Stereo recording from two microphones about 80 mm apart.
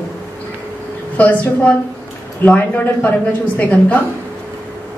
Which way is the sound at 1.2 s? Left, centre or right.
Centre.